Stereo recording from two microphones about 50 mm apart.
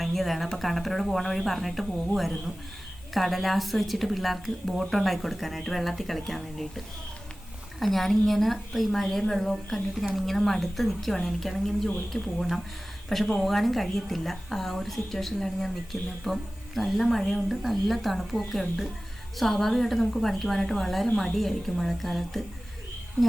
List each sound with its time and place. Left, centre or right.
0.0 s a woman's voice: centre
3.2 s a woman's voice: centre